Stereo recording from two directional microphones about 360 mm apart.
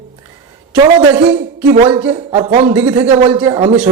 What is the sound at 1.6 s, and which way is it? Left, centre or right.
A man's voice, centre.